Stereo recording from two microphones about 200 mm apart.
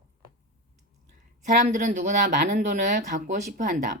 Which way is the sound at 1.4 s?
35° right (ahead or behind).